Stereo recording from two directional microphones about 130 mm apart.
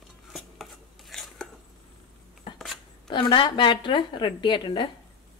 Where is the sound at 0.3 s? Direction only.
Centre (ahead or behind).